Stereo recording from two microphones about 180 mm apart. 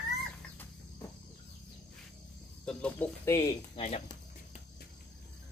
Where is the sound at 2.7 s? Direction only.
5° left (ahead or behind).